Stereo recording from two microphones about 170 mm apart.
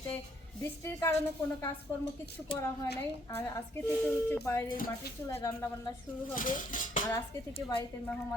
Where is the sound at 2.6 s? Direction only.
15° left (ahead or behind).